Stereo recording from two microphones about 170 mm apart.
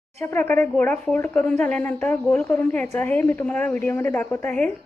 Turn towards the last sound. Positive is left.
turn(degrees=10)  # may be behind; listen again after turning